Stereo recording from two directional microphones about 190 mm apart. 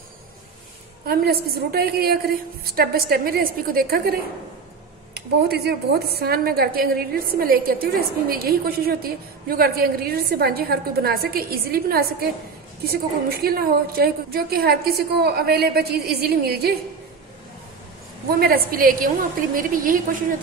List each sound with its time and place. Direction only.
1.0 s a woman's voice: 55° right (ahead or behind)
18.4 s a woman's voice: 50° right (ahead or behind)